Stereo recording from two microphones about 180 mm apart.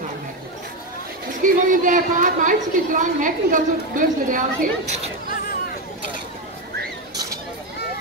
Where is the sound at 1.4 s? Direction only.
45° right (ahead or behind).